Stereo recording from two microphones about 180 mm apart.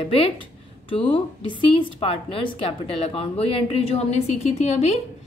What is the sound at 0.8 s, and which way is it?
A woman's voice, 30° left (ahead or behind).